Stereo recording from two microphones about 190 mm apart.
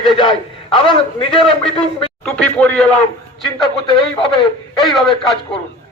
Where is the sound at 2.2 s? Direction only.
5° left (ahead or behind).